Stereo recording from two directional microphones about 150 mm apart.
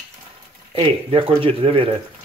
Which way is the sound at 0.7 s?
35° right (ahead or behind).